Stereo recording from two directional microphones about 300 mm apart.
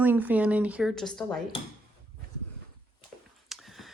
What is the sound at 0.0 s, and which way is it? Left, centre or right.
Speech, centre.